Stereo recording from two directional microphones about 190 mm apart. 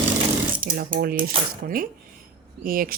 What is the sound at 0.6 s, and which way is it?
Mechanisms, 50° right (ahead or behind).